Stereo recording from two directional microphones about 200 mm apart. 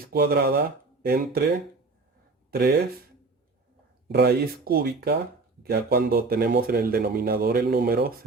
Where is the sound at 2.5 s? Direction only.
50° right (ahead or behind).